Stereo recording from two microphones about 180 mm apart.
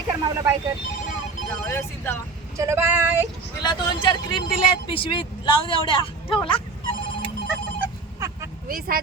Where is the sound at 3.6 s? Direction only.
25° left (ahead or behind).